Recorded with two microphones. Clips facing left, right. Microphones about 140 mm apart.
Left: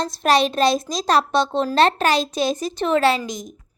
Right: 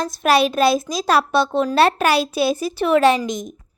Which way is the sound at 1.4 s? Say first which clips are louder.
Right 2 dB; 25° left (ahead or behind).